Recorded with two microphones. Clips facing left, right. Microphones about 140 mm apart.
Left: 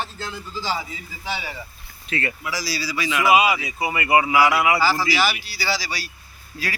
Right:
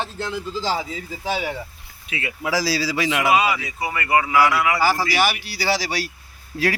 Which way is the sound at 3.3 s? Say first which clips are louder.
Left 4 dB; 10° left (ahead or behind).